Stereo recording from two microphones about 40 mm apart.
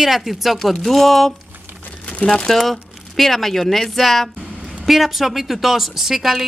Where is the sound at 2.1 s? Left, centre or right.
Left.